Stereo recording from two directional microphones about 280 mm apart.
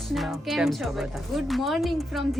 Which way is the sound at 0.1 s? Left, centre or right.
Centre.